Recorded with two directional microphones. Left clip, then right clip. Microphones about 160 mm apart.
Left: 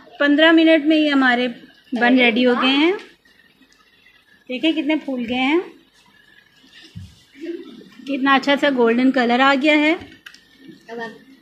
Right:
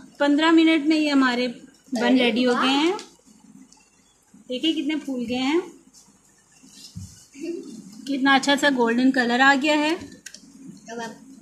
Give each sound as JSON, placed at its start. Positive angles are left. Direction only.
{"t": 0.2, "sound": "a woman's voice", "side_deg": 10}
{"t": 4.5, "sound": "speech", "side_deg": 20}
{"t": 8.0, "sound": "a woman's voice", "side_deg": 0}